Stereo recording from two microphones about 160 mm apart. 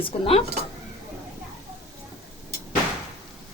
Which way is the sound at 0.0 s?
35° left (ahead or behind).